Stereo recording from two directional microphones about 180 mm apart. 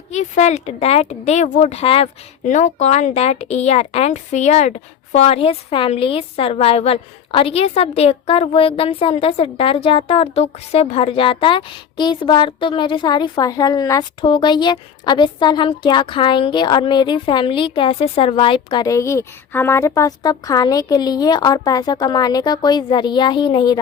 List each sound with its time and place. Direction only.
0.1 s a woman's voice: 40° left (ahead or behind); by 23.8 s 25° left (ahead or behind)